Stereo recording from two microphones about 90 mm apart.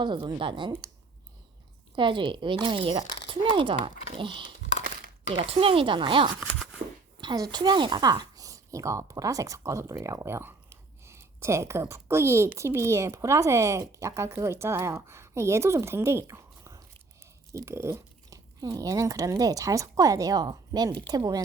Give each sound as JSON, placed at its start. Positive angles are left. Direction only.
{"t": 0.0, "sound": "speech", "side_deg": -60}
{"t": 2.0, "sound": "speech", "side_deg": -65}
{"t": 5.3, "sound": "speech", "side_deg": -90}
{"t": 7.3, "sound": "a woman's voice", "side_deg": -50}